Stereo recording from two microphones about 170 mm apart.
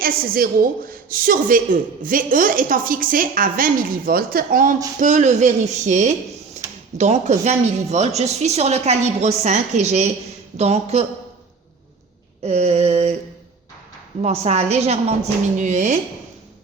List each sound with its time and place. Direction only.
0.0 s a woman's voice: 60° right (ahead or behind); by 11.0 s 40° right (ahead or behind)
12.4 s speech: 40° right (ahead or behind)
14.2 s a woman's voice: 40° right (ahead or behind)